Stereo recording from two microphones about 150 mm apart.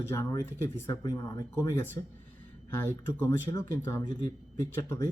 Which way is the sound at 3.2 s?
20° left (ahead or behind).